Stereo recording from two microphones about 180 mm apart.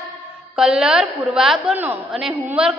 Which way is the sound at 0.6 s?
5° right (ahead or behind).